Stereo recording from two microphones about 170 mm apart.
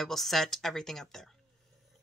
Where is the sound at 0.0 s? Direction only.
Centre (ahead or behind).